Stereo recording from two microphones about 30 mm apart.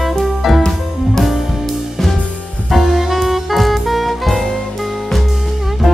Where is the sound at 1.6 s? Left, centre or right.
Centre.